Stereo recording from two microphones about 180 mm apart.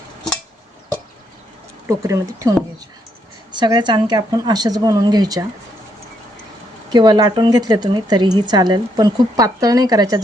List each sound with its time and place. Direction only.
1.9 s speech: 15° right (ahead or behind)
6.9 s speech: 25° right (ahead or behind)